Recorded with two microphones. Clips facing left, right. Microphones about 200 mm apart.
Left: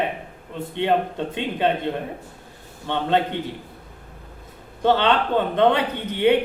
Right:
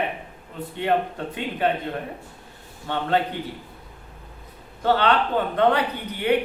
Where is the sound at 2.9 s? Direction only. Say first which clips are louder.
Left 2 dB; 25° left (ahead or behind).